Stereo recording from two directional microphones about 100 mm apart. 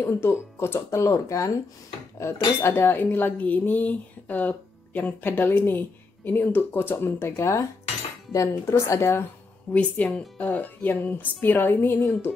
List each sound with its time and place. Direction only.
0.0 s speech: 25° left (ahead or behind)
9.7 s speech: 15° left (ahead or behind)